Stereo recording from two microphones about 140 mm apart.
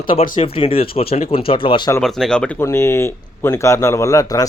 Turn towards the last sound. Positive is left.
turn(degrees=25)  # may be behind; listen again after turning